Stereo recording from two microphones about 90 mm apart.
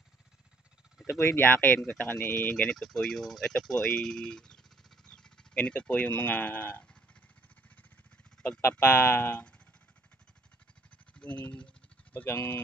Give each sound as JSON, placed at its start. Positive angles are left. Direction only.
{"t": 1.0, "sound": "speech", "side_deg": 30}
{"t": 2.5, "sound": "speech", "side_deg": 5}
{"t": 8.5, "sound": "speech", "side_deg": 30}
{"t": 11.1, "sound": "speech", "side_deg": 15}